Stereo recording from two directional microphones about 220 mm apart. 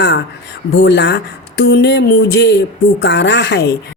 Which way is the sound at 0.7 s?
50° left (ahead or behind).